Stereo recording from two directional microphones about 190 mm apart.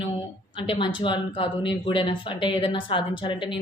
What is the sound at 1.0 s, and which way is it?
Speech, 25° left (ahead or behind).